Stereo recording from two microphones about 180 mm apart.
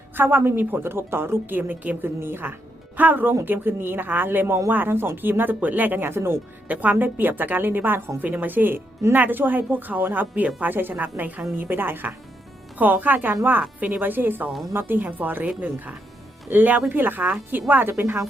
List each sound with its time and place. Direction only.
0.2 s speech: 10° right (ahead or behind)